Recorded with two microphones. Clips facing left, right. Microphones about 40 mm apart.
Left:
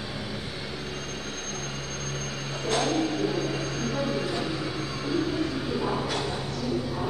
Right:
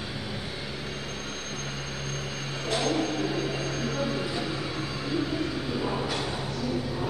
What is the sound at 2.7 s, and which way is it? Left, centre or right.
Vehicle, centre.